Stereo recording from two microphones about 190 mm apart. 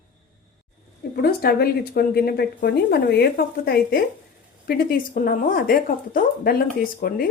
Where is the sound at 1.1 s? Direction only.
55° left (ahead or behind).